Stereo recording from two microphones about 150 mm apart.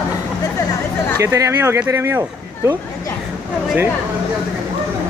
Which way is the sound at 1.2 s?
20° right (ahead or behind).